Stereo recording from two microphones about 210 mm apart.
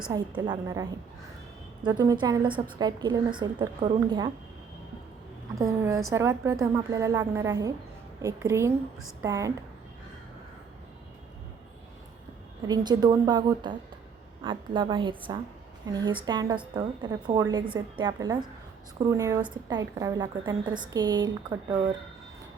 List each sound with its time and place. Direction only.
0.1 s a woman's voice: 20° right (ahead or behind)
5.5 s a woman's voice: 15° right (ahead or behind)
12.6 s a woman's voice: 20° right (ahead or behind)